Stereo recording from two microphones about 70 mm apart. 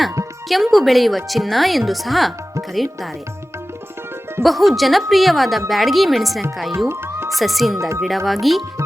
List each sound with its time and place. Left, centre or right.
0.4 s a woman's voice: centre
4.4 s a woman's voice: centre
6.8 s music: right
7.3 s a woman's voice: centre
7.8 s speech: right
8.3 s a woman's voice: centre